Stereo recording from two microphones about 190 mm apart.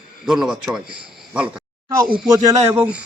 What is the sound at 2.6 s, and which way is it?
Speech, 10° right (ahead or behind).